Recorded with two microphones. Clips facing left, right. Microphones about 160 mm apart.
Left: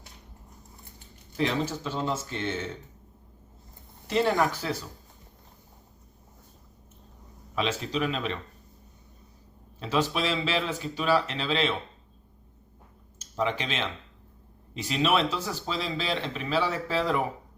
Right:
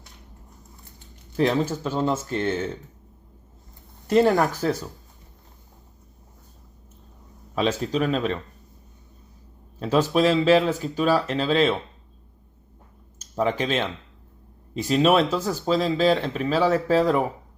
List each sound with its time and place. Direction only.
1.4 s speech: 45° right (ahead or behind)
4.0 s speech: 45° right (ahead or behind)
7.5 s speech: 40° right (ahead or behind)
9.8 s speech: 45° right (ahead or behind)
13.1 s speech: 40° right (ahead or behind)